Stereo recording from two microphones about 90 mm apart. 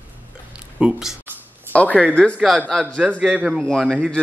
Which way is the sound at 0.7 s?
10° right (ahead or behind).